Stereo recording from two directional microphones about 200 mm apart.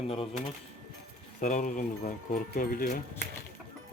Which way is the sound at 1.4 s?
40° left (ahead or behind).